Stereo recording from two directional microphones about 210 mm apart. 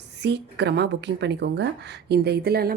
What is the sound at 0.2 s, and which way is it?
A woman's voice, 55° right (ahead or behind).